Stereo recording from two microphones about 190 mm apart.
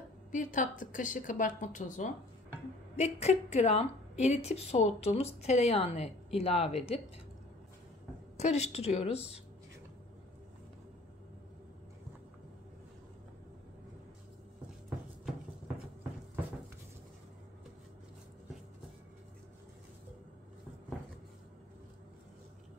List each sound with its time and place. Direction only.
0.3 s a woman's voice: 45° left (ahead or behind)
8.4 s a woman's voice: 35° left (ahead or behind)